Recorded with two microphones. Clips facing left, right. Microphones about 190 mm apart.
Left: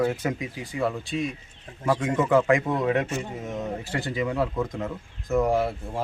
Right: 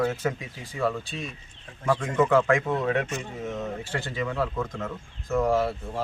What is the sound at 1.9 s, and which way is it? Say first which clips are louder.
A man's voice: even; 20° left (ahead or behind).